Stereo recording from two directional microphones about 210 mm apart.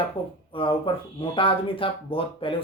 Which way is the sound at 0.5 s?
25° left (ahead or behind).